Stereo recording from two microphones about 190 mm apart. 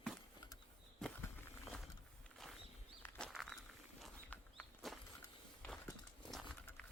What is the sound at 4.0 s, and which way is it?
Walk, 5° left (ahead or behind).